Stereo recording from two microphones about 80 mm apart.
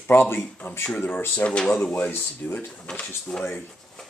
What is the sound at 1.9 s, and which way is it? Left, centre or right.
Speech, left.